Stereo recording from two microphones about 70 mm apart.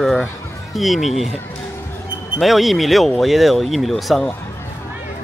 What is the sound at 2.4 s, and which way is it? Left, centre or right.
Speech, centre.